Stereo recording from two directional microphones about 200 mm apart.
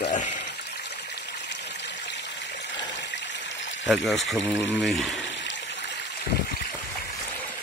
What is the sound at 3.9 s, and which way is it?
Speech, centre (ahead or behind).